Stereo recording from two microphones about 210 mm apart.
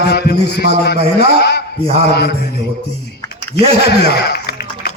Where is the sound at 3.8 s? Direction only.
50° left (ahead or behind).